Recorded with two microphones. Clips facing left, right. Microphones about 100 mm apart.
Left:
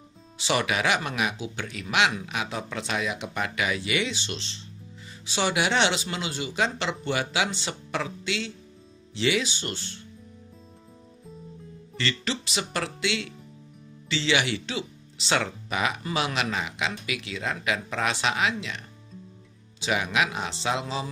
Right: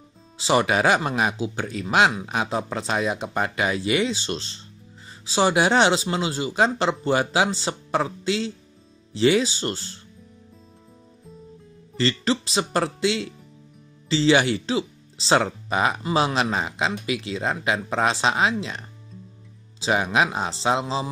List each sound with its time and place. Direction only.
0.4 s speech: 35° right (ahead or behind)
12.0 s speech: 35° right (ahead or behind)